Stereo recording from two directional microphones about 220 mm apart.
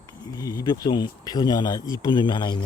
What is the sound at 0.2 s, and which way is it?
Speech, 15° left (ahead or behind).